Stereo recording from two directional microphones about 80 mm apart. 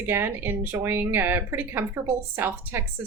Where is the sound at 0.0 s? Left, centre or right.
Right.